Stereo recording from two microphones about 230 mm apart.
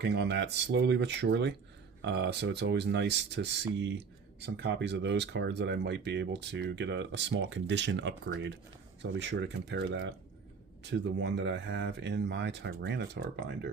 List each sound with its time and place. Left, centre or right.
0.0 s speech: right